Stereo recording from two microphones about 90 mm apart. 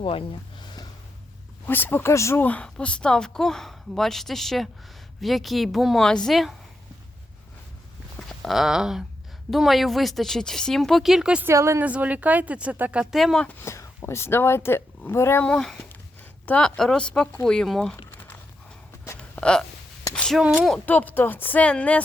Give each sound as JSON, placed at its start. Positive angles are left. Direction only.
{"t": 0.0, "sound": "speech", "side_deg": 85}
{"t": 0.6, "sound": "gasp", "side_deg": 55}
{"t": 1.6, "sound": "speech", "side_deg": 25}
{"t": 2.4, "sound": "a woman's voice", "side_deg": 15}
{"t": 8.4, "sound": "a woman's voice", "side_deg": 0}
{"t": 11.4, "sound": "a woman's voice", "side_deg": -30}
{"t": 11.8, "sound": "speech", "side_deg": -15}
{"t": 13.1, "sound": "a woman's voice", "side_deg": 0}
{"t": 13.7, "sound": "speech", "side_deg": 30}
{"t": 15.4, "sound": "a woman's voice", "side_deg": 5}
{"t": 19.4, "sound": "speech", "side_deg": 10}
{"t": 20.1, "sound": "a sound", "side_deg": 5}
{"t": 20.8, "sound": "speech", "side_deg": 20}